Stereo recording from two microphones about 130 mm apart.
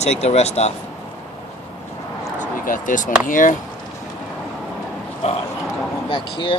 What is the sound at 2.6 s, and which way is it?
Speech, 85° left.